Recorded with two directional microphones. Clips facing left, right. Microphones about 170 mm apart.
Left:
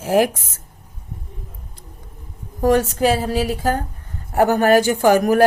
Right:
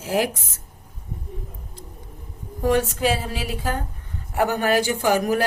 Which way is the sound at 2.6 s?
40° left (ahead or behind).